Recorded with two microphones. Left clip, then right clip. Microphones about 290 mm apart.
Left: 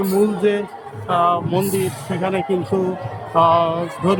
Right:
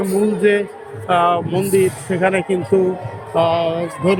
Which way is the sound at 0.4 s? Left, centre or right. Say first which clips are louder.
Right 3 dB; centre.